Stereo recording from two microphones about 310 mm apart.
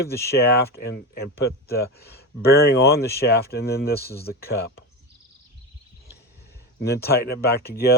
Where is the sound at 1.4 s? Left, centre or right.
Left.